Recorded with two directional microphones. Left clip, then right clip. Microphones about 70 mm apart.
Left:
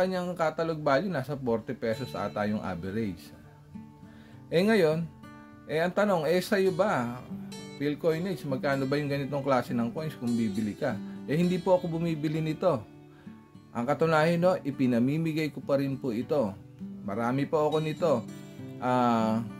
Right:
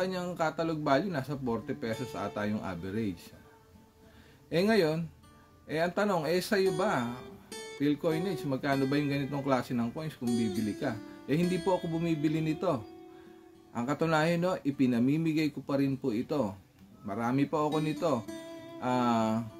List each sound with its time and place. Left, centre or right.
0.0 s speech: left
4.5 s speech: left